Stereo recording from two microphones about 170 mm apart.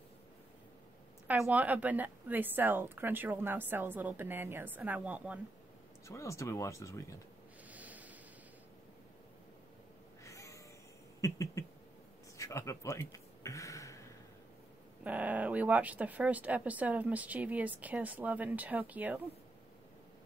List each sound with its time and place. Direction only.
1.2 s speech: 10° right (ahead or behind)
6.0 s speech: 20° left (ahead or behind)
7.7 s snort: 10° right (ahead or behind)
10.2 s a sound: 20° left (ahead or behind)
15.0 s speech: 10° right (ahead or behind)